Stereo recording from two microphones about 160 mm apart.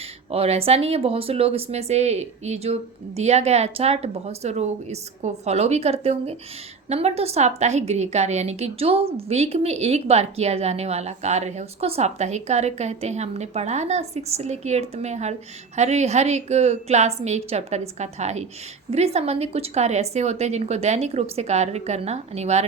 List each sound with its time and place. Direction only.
0.3 s a woman's voice: 40° right (ahead or behind)